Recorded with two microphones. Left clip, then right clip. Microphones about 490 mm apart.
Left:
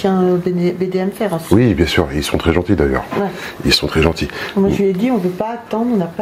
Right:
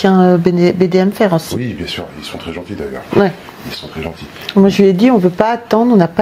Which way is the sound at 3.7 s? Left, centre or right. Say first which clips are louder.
Left 11 dB; left.